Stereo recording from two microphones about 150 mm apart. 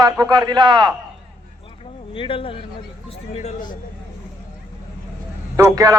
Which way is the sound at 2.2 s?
35° left (ahead or behind).